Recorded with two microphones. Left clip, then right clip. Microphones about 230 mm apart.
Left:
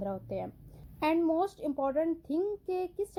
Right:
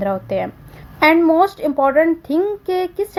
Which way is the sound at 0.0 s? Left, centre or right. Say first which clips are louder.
Right 16 dB; right.